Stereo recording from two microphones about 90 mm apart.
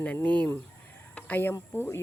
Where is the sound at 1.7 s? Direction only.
25° left (ahead or behind).